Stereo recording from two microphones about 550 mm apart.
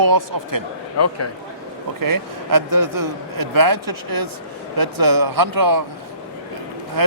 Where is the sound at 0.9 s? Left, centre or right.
Left.